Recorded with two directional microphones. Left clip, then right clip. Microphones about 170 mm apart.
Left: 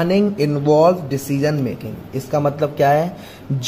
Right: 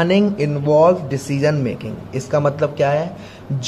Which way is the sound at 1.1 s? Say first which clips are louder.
Right 1 dB; 20° left (ahead or behind).